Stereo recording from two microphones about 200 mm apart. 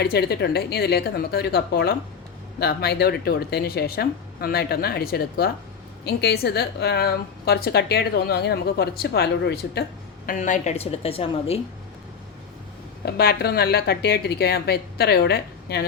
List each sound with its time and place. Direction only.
0.0 s a woman's voice: 55° left (ahead or behind)
10.2 s a woman's voice: 40° left (ahead or behind)
13.1 s a woman's voice: 50° left (ahead or behind)